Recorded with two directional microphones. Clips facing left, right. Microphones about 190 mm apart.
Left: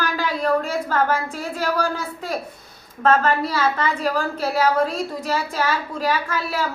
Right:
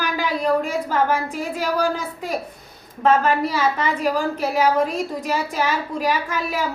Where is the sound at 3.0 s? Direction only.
15° right (ahead or behind).